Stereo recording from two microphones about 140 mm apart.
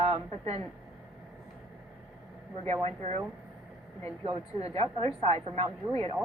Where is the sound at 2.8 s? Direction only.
45° right (ahead or behind).